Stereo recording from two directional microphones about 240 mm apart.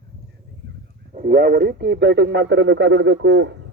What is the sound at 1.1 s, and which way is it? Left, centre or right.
Speech, right.